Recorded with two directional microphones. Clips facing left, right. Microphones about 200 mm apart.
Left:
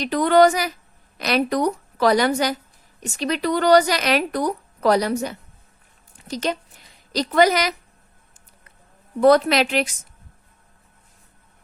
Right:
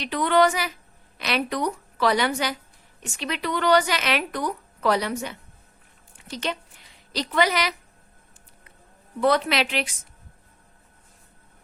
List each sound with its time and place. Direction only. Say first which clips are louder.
0.0 s a woman's voice: left 5 dB; 40° left (ahead or behind)
9.2 s a woman's voice: left 7 dB; 45° left (ahead or behind)